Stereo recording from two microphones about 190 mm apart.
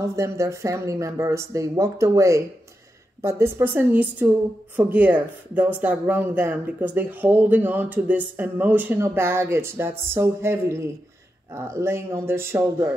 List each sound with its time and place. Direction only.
0.0 s speech: 15° right (ahead or behind)